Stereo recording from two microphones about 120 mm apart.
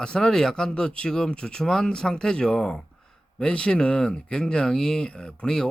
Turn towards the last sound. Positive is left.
turn(degrees=5)  # may be behind; listen again after turning